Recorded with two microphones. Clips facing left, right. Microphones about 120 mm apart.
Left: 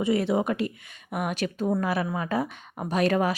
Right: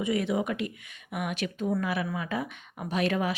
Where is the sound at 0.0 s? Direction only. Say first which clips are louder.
Left 4 dB; 30° left (ahead or behind).